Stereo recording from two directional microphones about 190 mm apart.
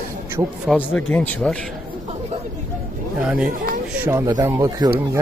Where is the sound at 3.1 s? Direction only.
5° right (ahead or behind).